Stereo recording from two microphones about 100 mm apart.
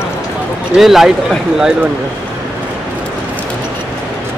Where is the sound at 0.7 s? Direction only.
Centre (ahead or behind).